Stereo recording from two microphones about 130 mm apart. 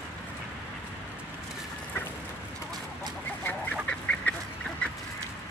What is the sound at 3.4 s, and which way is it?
Duck, 10° left (ahead or behind).